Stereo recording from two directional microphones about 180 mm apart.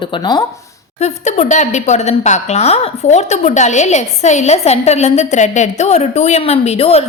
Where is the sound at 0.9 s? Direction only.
40° left (ahead or behind).